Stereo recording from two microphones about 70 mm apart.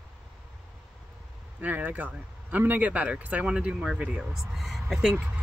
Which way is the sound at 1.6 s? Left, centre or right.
Right.